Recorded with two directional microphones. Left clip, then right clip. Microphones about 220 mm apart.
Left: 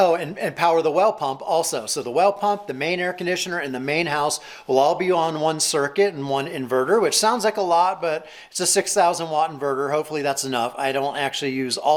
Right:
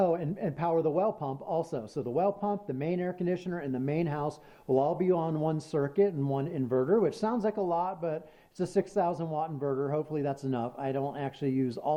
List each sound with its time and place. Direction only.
0.0 s speech: 10° left (ahead or behind)
9.6 s speech: 20° left (ahead or behind)
9.9 s speech: 5° left (ahead or behind)